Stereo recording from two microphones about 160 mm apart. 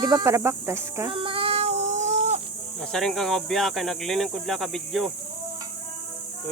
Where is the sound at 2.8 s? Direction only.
5° left (ahead or behind).